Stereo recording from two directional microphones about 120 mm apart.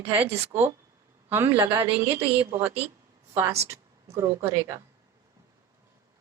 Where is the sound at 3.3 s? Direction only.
20° right (ahead or behind).